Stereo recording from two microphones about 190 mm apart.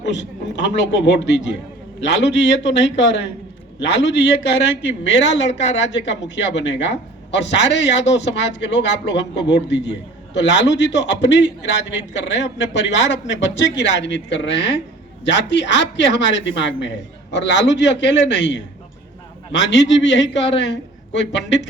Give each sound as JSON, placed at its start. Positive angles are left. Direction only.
{"t": 0.0, "sound": "a man's voice", "side_deg": 70}